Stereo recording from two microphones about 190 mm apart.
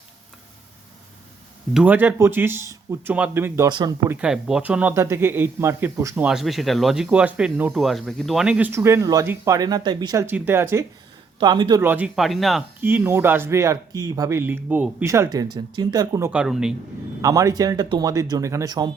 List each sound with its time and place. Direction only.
1.7 s speech: 10° right (ahead or behind)
4.1 s speech: 5° right (ahead or behind)
6.2 s speech: centre (ahead or behind)
11.3 s speech: 25° right (ahead or behind)
11.8 s speech: 10° right (ahead or behind)
12.8 s speech: 10° right (ahead or behind)
16.3 s speech: 5° right (ahead or behind)
17.2 s speech: 15° right (ahead or behind)